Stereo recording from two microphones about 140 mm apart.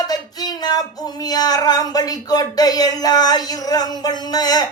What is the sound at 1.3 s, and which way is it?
Speech, 30° left (ahead or behind).